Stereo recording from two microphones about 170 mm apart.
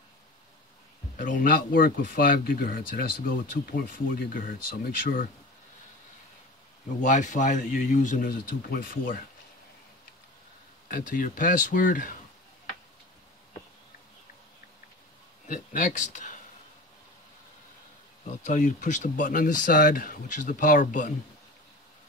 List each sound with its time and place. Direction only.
1.1 s speech: 55° left (ahead or behind)
7.0 s speech: 45° left (ahead or behind)
10.9 s speech: 55° left (ahead or behind)
15.4 s speech: 50° left (ahead or behind)
18.2 s speech: 45° left (ahead or behind)